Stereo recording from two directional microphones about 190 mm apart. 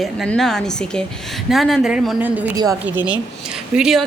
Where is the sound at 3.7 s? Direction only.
Centre (ahead or behind).